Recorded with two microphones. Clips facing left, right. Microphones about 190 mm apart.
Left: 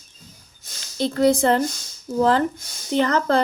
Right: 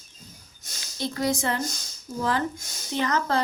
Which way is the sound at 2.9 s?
60° left (ahead or behind).